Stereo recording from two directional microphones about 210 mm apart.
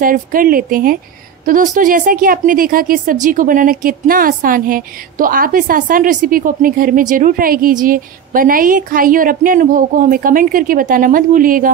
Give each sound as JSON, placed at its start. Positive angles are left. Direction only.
{"t": 0.0, "sound": "a woman's voice", "side_deg": -40}